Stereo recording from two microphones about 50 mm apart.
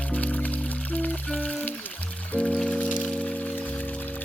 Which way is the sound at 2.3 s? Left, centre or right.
Centre.